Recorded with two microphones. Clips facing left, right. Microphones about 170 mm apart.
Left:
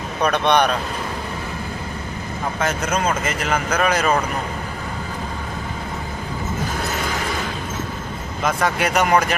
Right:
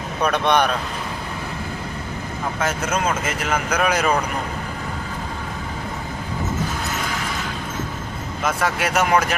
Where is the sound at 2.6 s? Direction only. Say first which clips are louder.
Left 1 dB; 5° right (ahead or behind).